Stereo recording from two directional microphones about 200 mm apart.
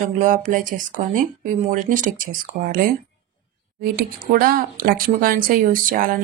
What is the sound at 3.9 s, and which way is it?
Speech, 45° right (ahead or behind).